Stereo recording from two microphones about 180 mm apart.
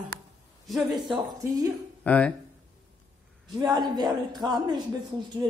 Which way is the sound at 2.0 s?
10° left (ahead or behind).